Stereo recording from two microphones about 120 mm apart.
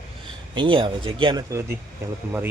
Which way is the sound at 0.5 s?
45° right (ahead or behind).